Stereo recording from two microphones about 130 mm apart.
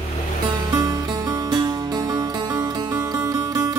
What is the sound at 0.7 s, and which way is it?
Music, 35° right (ahead or behind).